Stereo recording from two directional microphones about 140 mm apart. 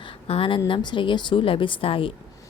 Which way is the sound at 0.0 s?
40° left (ahead or behind).